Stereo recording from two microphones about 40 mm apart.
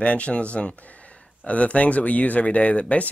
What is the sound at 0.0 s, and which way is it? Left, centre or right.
Speech, left.